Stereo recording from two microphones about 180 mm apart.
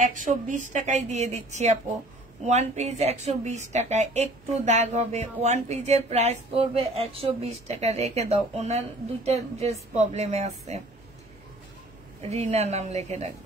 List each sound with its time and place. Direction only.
0.0 s a woman's voice: 45° right (ahead or behind)
12.2 s a woman's voice: 35° right (ahead or behind)